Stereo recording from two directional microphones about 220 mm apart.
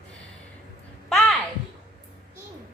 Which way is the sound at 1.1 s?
Centre (ahead or behind).